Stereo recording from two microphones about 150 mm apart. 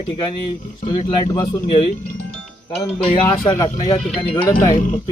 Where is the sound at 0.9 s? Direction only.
30° left (ahead or behind).